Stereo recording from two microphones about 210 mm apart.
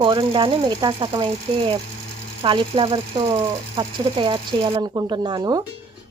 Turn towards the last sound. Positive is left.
turn(degrees=-20)  # may be behind; listen again after turning